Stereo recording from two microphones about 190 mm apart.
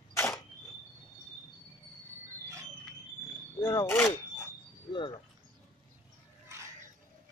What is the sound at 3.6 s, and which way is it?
Speech, 15° left (ahead or behind).